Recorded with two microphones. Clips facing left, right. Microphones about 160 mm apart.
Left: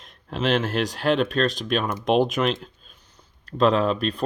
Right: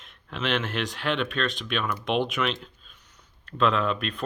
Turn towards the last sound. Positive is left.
turn(degrees=35)  # may be behind; listen again after turning